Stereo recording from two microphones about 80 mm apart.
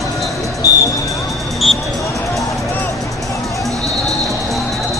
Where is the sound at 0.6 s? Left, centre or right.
Left.